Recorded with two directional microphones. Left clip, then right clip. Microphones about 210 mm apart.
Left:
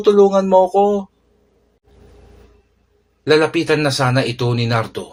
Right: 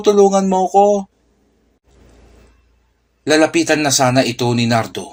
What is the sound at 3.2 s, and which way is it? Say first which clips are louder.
Speech: right 1 dB; 35° right (ahead or behind).